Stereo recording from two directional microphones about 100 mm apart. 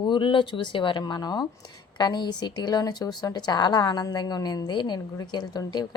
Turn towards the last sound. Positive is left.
turn(degrees=45)  # may be behind; listen again after turning